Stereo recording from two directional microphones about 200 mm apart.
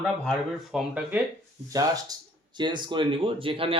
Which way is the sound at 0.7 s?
5° right (ahead or behind).